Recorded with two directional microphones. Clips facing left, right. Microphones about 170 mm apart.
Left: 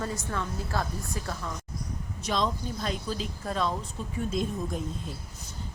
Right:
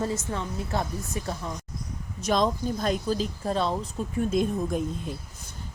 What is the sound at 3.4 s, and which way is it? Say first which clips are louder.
Speech: right 3 dB; 30° right (ahead or behind).